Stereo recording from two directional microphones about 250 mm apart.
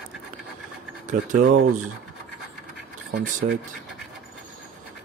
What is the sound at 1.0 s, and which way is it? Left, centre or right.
Speech, right.